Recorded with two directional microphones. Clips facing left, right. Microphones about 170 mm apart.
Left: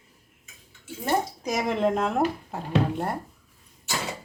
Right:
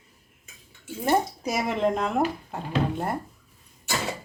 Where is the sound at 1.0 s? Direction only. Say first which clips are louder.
Right 2 dB; 5° right (ahead or behind).